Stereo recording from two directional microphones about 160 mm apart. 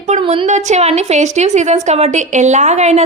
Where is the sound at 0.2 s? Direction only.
35° right (ahead or behind).